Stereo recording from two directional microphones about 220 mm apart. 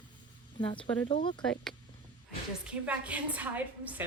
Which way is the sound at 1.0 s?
20° left (ahead or behind).